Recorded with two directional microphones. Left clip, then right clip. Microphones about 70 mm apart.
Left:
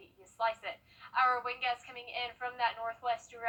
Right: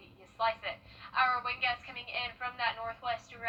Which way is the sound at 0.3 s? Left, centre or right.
Left.